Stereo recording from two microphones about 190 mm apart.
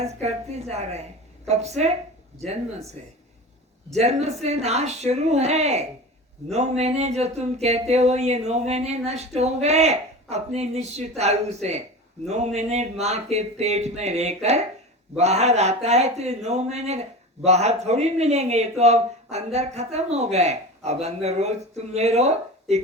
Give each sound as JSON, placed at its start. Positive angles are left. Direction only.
{"t": 0.2, "sound": "speech", "side_deg": -35}
{"t": 3.9, "sound": "speech", "side_deg": -35}